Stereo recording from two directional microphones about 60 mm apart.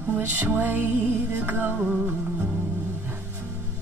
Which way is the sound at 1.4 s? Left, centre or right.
Right.